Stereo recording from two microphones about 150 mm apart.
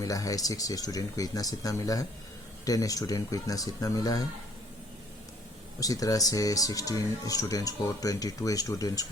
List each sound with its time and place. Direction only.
0.0 s speech: 25° left (ahead or behind)
5.8 s speech: 25° left (ahead or behind)